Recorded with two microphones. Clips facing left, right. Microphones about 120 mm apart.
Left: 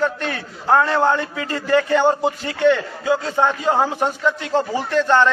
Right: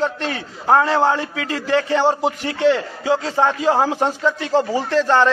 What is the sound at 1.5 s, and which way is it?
A man's voice, 25° right (ahead or behind).